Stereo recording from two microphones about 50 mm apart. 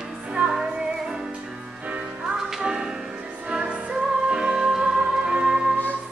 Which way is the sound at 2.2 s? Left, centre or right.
Centre.